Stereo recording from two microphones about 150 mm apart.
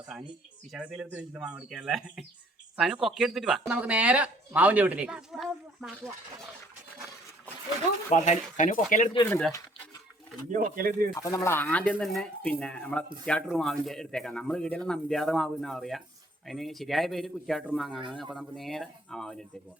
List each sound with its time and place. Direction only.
0.3 s speech: 5° right (ahead or behind)
8.1 s speech: 55° left (ahead or behind)
10.5 s speech: 70° right (ahead or behind)
11.2 s speech: 20° left (ahead or behind); by 19.5 s 5° left (ahead or behind)